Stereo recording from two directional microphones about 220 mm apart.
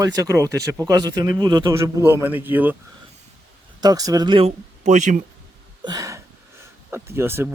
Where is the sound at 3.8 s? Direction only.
15° right (ahead or behind); by 5.2 s 35° right (ahead or behind).